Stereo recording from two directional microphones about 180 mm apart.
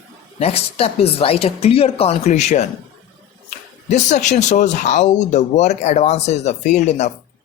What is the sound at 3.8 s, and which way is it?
Speech, 40° left (ahead or behind).